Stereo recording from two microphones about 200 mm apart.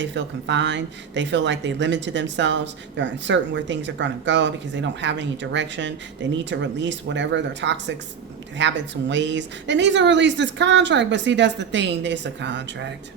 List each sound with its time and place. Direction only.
0.0 s a woman's voice: 60° right (ahead or behind)